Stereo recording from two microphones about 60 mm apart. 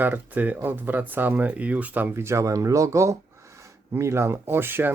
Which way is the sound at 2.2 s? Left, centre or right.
Right.